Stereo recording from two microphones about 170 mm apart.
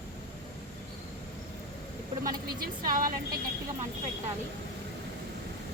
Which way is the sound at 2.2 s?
55° right (ahead or behind).